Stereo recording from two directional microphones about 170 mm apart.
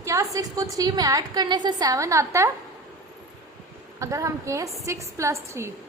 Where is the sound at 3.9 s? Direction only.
20° right (ahead or behind).